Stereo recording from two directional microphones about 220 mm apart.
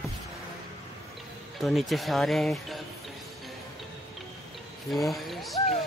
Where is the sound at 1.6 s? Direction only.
Centre (ahead or behind).